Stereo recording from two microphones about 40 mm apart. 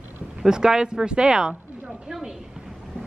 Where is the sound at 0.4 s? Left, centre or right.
Centre.